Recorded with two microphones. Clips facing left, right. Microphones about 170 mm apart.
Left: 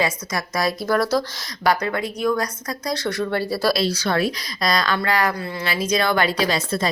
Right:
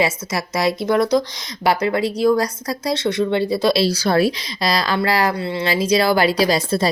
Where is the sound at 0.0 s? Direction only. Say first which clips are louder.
Right 3 dB; 25° right (ahead or behind).